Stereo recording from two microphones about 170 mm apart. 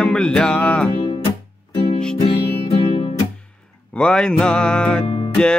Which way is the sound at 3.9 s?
5° left (ahead or behind).